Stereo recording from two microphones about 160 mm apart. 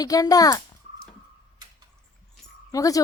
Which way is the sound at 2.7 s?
20° left (ahead or behind).